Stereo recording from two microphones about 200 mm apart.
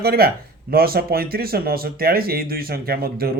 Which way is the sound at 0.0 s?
50° right (ahead or behind).